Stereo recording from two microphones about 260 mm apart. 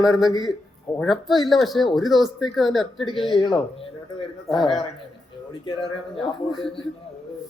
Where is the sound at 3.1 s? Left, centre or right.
Centre.